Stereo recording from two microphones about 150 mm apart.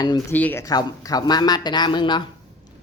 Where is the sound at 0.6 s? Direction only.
25° left (ahead or behind).